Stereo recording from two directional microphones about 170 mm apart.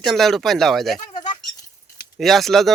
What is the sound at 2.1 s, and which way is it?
Speech, centre (ahead or behind).